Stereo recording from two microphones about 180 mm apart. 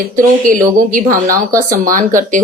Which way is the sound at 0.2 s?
50° right (ahead or behind).